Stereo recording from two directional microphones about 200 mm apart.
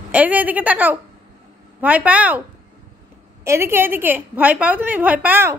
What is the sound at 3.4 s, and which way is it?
A woman's voice, 15° right (ahead or behind).